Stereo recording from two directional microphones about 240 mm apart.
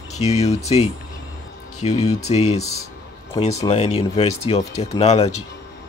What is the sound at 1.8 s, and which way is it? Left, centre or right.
Speech, left.